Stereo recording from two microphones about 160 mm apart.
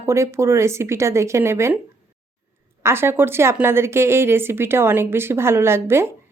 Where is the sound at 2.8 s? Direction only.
15° right (ahead or behind).